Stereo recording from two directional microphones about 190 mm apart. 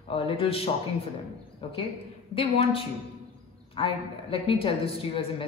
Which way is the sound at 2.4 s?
30° left (ahead or behind).